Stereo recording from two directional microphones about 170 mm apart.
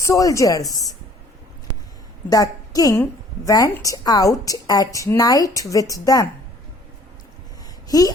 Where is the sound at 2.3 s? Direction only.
20° left (ahead or behind).